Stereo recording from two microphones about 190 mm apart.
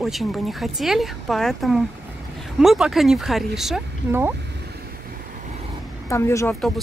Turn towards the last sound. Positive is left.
turn(degrees=15)  # may be behind; listen again after turning